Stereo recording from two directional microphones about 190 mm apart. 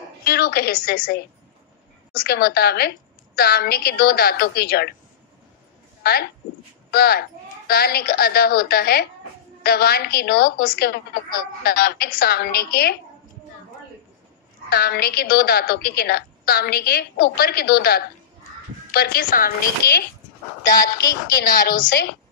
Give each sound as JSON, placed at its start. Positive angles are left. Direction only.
{"t": 0.2, "sound": "a woman's voice", "side_deg": 55}
{"t": 6.9, "sound": "a woman's voice", "side_deg": 55}
{"t": 14.7, "sound": "a woman's voice", "side_deg": 55}
{"t": 20.8, "sound": "a woman's voice", "side_deg": 20}
{"t": 21.5, "sound": "a woman's voice", "side_deg": 50}